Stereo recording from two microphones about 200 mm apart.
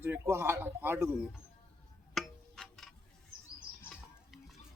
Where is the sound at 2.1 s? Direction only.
Centre (ahead or behind).